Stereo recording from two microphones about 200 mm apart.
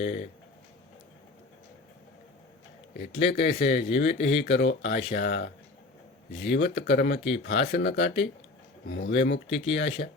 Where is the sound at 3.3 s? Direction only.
55° left (ahead or behind).